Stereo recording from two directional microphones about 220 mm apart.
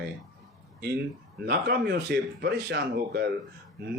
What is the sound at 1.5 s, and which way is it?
Speech, 45° right (ahead or behind).